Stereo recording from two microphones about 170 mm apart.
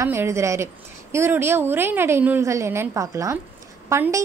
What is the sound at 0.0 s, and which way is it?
A woman's voice, 15° right (ahead or behind).